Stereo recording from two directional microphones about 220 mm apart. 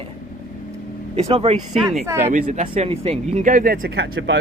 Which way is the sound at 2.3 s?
35° right (ahead or behind).